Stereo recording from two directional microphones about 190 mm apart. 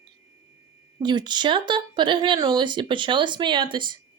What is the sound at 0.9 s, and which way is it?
Speech, 25° right (ahead or behind).